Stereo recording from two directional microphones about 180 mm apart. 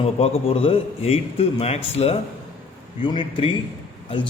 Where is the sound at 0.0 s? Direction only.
30° left (ahead or behind).